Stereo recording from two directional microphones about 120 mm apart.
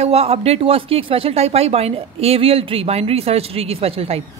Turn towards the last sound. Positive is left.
turn(degrees=-55)  # may be behind; listen again after turning